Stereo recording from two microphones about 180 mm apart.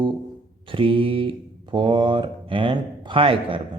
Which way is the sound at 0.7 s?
30° right (ahead or behind).